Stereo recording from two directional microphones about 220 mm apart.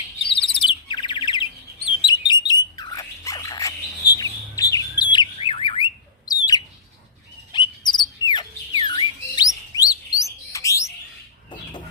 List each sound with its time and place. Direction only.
0.3 s bird: 25° left (ahead or behind)